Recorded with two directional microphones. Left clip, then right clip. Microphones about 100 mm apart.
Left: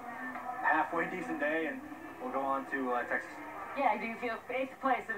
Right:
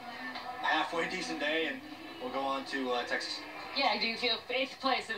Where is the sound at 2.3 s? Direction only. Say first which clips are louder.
Left 1 dB; 30° right (ahead or behind).